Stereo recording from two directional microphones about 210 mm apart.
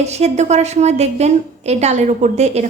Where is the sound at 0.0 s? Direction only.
30° right (ahead or behind).